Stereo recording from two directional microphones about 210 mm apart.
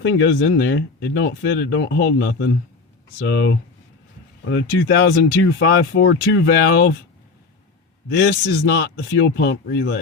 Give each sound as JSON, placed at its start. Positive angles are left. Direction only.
{"t": 0.0, "sound": "speech", "side_deg": 70}
{"t": 5.5, "sound": "speech", "side_deg": 70}
{"t": 6.1, "sound": "a man's voice", "side_deg": 50}
{"t": 8.1, "sound": "a man's voice", "side_deg": 50}
{"t": 9.1, "sound": "speech", "side_deg": 60}